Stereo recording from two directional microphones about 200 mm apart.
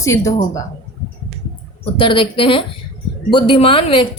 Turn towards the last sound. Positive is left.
turn(degrees=25)  # may be behind; listen again after turning